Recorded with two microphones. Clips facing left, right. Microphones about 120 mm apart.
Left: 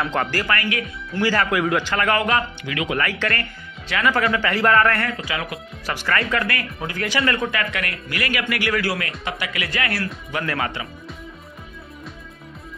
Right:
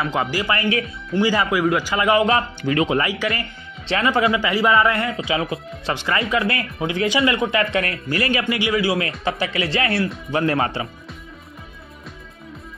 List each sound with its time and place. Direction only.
0.0 s a man's voice: 10° right (ahead or behind); by 0.8 s 25° right (ahead or behind)
1.1 s a man's voice: 15° right (ahead or behind)
1.5 s a man's voice: 5° right (ahead or behind); by 2.4 s 20° right (ahead or behind)
2.6 s speech: 35° right (ahead or behind)
3.0 s a man's voice: 15° right (ahead or behind)
3.8 s speech: 25° right (ahead or behind)
7.7 s speech: 30° right (ahead or behind)
9.2 s speech: 30° right (ahead or behind)